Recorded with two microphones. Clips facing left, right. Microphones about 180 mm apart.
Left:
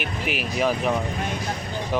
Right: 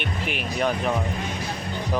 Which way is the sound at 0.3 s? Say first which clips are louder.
Left 2 dB; 5° left (ahead or behind).